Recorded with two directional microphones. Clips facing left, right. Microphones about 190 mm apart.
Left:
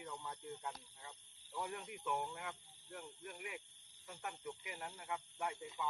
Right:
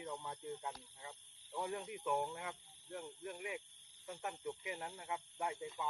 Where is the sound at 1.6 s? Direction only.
30° right (ahead or behind).